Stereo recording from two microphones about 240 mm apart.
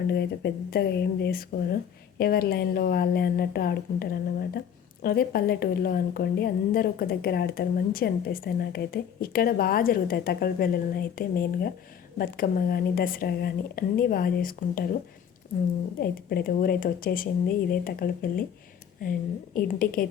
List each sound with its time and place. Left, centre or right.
0.1 s a woman's voice: left
16.0 s a woman's voice: left
19.5 s a woman's voice: left